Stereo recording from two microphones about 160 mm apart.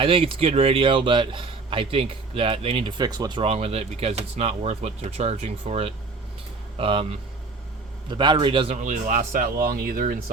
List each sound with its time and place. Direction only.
0.0 s a man's voice: 35° right (ahead or behind)
3.0 s a man's voice: 25° right (ahead or behind)
3.5 s a man's voice: 40° right (ahead or behind)
8.7 s speech: 50° right (ahead or behind)